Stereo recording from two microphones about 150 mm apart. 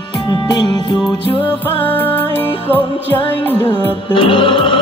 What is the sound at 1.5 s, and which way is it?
Music, 10° left (ahead or behind).